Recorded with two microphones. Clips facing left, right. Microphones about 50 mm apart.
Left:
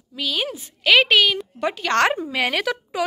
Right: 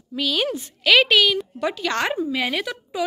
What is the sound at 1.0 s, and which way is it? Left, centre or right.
A woman's voice, left.